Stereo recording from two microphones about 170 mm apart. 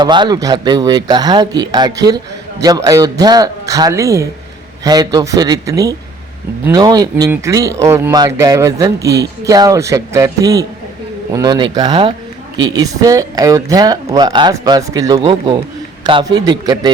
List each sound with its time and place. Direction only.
0.0 s speech: 25° right (ahead or behind)